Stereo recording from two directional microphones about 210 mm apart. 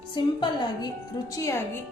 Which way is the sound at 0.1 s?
20° left (ahead or behind).